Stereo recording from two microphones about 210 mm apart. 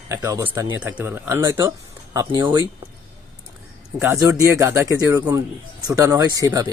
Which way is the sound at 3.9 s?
10° right (ahead or behind).